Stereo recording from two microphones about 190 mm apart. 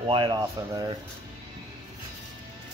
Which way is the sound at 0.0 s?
25° right (ahead or behind).